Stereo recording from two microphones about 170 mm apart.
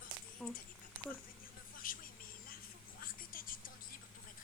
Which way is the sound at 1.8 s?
55° left (ahead or behind).